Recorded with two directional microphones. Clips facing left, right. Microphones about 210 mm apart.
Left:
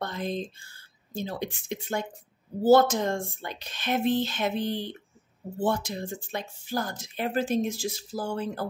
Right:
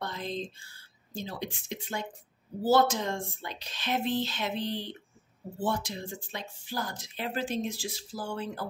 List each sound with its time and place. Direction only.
0.0 s speech: 50° left (ahead or behind)